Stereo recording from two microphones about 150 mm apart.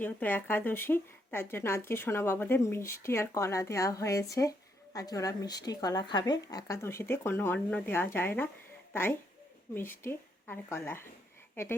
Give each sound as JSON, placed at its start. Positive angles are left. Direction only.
{"t": 0.0, "sound": "speech", "side_deg": 10}